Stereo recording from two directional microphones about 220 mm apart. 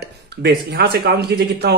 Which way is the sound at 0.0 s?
45° right (ahead or behind).